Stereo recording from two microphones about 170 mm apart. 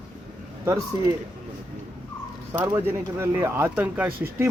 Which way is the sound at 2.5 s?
15° right (ahead or behind).